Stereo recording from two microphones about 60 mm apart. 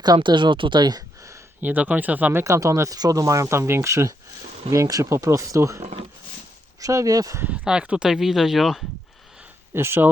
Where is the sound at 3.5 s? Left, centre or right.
Right.